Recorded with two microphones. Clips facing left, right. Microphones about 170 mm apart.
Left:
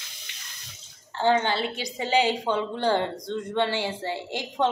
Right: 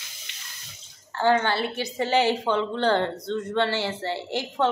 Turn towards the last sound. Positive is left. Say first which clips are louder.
# right 1 dB
turn(degrees=15)  # may be behind; listen again after turning